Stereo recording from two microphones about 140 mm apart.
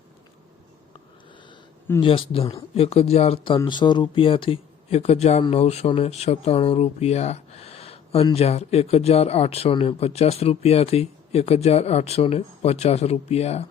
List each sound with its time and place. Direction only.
2.0 s speech: 40° left (ahead or behind)